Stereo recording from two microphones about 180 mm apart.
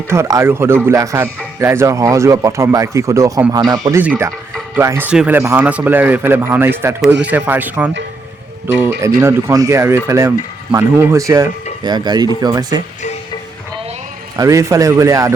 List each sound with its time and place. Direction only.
0.1 s speech: 15° right (ahead or behind)
9.0 s speech: 15° right (ahead or behind)
14.3 s speech: 15° right (ahead or behind)